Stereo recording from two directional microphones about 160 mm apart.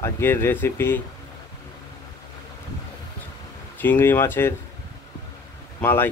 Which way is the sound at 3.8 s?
15° left (ahead or behind).